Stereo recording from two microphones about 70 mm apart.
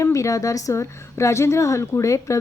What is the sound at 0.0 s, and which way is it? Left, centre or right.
A woman's voice, left.